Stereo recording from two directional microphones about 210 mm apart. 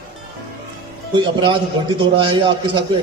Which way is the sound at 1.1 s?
20° right (ahead or behind).